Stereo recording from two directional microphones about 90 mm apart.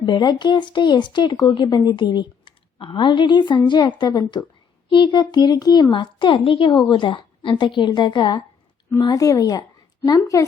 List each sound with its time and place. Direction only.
0.0 s speech: 55° left (ahead or behind)
5.9 s a woman's voice: 65° left (ahead or behind); by 6.7 s 80° left
6.8 s speech: 65° left (ahead or behind)
9.0 s a woman's voice: 45° left (ahead or behind)